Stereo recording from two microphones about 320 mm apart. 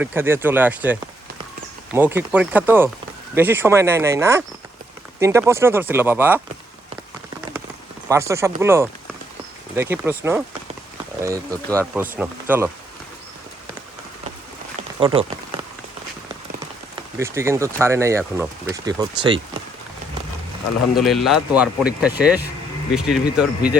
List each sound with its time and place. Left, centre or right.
0.0 s speech: centre
8.0 s speech: centre
14.9 s speech: centre
17.2 s speech: centre
20.9 s speech: centre